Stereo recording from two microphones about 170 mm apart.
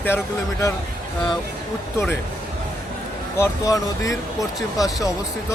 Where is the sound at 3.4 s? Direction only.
20° left (ahead or behind).